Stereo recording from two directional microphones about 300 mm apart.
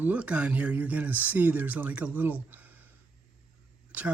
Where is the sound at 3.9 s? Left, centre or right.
Centre.